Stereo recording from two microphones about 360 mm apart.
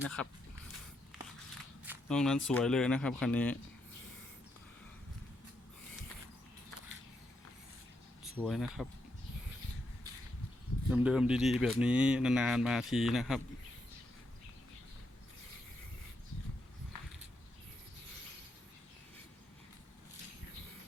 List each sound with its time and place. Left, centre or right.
0.0 s speech: centre
1.8 s a sound: centre
2.5 s speech: centre
8.2 s speech: centre
10.8 s speech: centre